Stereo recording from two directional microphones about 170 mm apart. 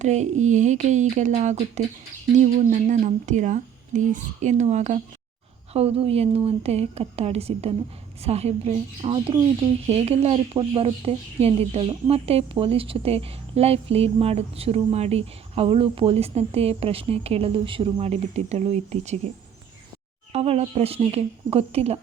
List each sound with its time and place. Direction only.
0.0 s speech: 45° right (ahead or behind)
20.3 s speech: 40° right (ahead or behind)